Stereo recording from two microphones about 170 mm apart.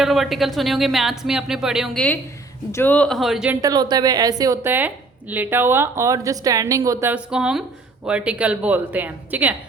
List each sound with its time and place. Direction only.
0.0 s speech: centre (ahead or behind)
3.6 s a woman's voice: 25° right (ahead or behind)